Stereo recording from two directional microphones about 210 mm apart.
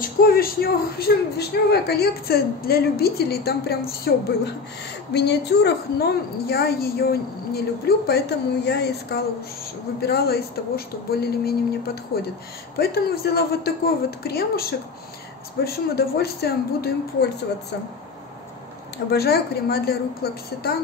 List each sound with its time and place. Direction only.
0.0 s a woman's voice: 45° left (ahead or behind)
19.0 s a woman's voice: 50° left (ahead or behind)